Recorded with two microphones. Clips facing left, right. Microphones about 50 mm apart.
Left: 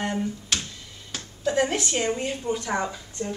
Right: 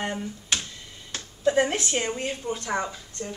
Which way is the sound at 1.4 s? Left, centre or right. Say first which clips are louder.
Right 1 dB; centre.